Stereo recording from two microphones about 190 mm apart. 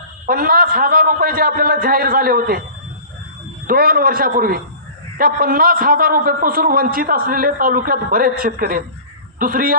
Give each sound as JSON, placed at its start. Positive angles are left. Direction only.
{"t": 0.3, "sound": "a man's voice", "side_deg": -50}
{"t": 3.7, "sound": "a man's voice", "side_deg": -50}